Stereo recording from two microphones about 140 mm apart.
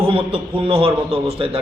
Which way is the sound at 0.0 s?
40° right (ahead or behind).